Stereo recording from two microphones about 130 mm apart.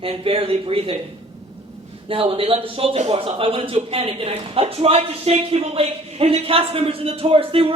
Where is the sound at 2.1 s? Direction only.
45° right (ahead or behind).